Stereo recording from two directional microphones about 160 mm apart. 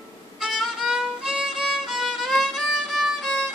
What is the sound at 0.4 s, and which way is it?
Violin, centre (ahead or behind).